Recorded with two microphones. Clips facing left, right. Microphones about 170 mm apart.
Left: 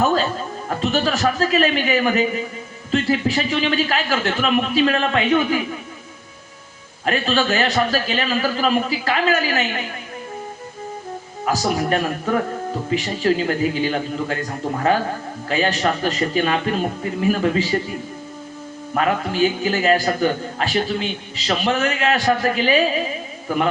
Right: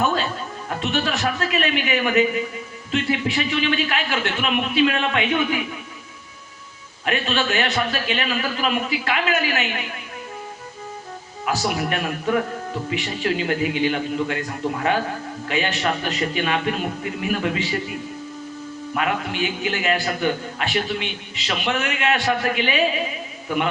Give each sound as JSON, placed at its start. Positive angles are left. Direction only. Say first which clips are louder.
{"t": 0.0, "sound": "music", "louder": "left 4 dB", "side_deg": 35}
{"t": 0.8, "sound": "a man's voice", "louder": "left 4 dB", "side_deg": 35}
{"t": 7.0, "sound": "a man's voice", "louder": "left 3 dB", "side_deg": 35}
{"t": 11.4, "sound": "a man's voice", "louder": "left 3 dB", "side_deg": 35}
{"t": 18.9, "sound": "a man's voice", "louder": "left 5 dB", "side_deg": 40}